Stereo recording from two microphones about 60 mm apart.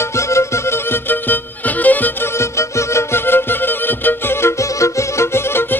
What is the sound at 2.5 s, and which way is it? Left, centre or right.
Music, left.